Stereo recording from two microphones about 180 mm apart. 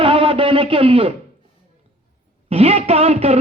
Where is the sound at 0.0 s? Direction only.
30° right (ahead or behind).